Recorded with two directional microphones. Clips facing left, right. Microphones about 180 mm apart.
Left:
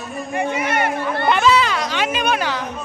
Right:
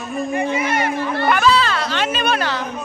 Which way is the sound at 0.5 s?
60° left (ahead or behind).